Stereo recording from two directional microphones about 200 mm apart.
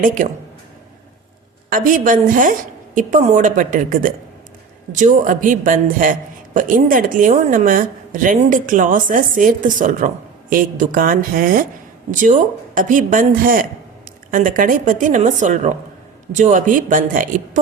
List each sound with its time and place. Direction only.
0.0 s a man's voice: 40° right (ahead or behind)
1.7 s a man's voice: 40° right (ahead or behind)